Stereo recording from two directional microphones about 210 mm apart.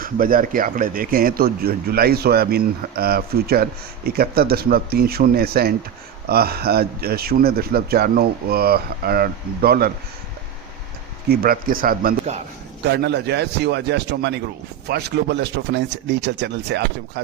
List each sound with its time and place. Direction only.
0.0 s speech: 40° right (ahead or behind)
11.3 s speech: 45° right (ahead or behind)
12.8 s speech: 50° right (ahead or behind)